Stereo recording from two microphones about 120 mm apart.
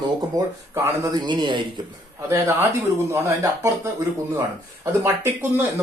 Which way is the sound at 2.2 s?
20° right (ahead or behind).